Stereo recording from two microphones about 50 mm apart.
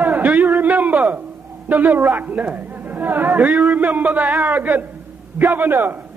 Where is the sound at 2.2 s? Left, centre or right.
Right.